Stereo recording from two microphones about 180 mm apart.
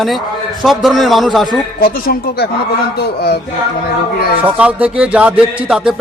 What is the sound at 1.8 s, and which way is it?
Speech, 55° left (ahead or behind).